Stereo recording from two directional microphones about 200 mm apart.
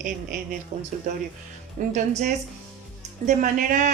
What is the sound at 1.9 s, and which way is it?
A woman's voice, 35° right (ahead or behind).